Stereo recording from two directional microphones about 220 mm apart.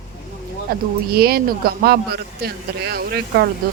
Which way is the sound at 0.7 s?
45° right (ahead or behind).